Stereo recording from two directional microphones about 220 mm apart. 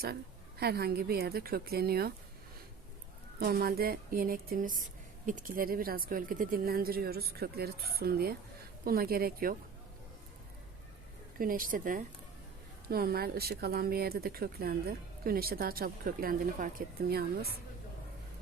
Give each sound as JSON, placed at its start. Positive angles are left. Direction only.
{"t": 0.6, "sound": "speech", "side_deg": -45}
{"t": 3.4, "sound": "a woman's voice", "side_deg": -40}
{"t": 11.3, "sound": "a woman's voice", "side_deg": -40}